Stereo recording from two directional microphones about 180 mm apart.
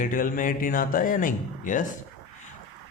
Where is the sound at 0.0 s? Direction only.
50° left (ahead or behind).